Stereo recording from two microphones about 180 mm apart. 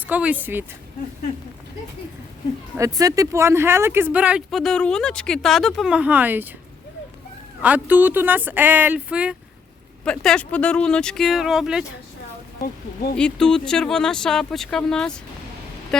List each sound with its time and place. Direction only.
0.1 s speech: 10° right (ahead or behind)
2.7 s speech: 20° right (ahead or behind)
7.6 s speech: 10° right (ahead or behind)
10.0 s speech: 5° left (ahead or behind)
12.6 s speech: 55° left (ahead or behind)
13.1 s speech: 5° left (ahead or behind)